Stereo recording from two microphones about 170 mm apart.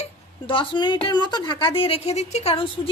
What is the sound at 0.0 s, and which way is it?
A woman's voice, 30° left (ahead or behind).